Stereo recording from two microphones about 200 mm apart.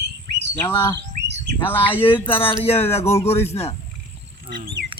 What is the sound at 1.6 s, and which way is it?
Speech, 10° left (ahead or behind).